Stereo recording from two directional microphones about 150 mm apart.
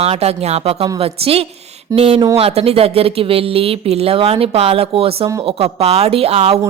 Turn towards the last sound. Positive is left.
turn(degrees=-45)  # may be behind; listen again after turning